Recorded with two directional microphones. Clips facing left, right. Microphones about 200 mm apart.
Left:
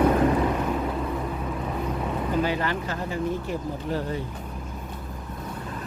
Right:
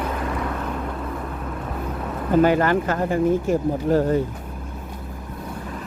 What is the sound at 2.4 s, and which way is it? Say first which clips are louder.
Speech: right 12 dB; 50° right (ahead or behind).